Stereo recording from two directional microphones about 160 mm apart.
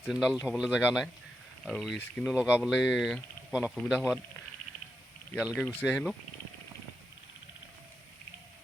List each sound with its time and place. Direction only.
0.0 s speech: 5° right (ahead or behind)
5.4 s speech: 5° right (ahead or behind)
5.6 s speech: 5° left (ahead or behind)